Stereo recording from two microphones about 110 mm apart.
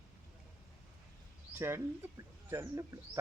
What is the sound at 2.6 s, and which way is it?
Speech, 30° right (ahead or behind).